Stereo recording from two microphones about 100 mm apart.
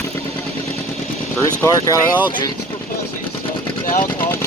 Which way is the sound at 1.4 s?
30° left (ahead or behind).